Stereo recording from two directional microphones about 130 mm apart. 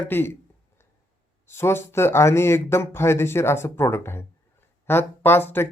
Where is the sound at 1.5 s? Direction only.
20° left (ahead or behind).